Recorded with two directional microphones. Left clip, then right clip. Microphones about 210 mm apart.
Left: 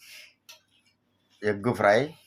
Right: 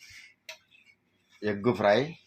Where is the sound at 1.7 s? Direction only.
20° left (ahead or behind).